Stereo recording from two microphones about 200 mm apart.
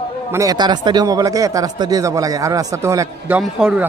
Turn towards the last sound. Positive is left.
turn(degrees=-5)  # may be behind; listen again after turning